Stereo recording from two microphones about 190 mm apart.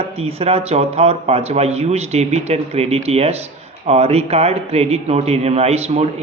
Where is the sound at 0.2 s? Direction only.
30° right (ahead or behind).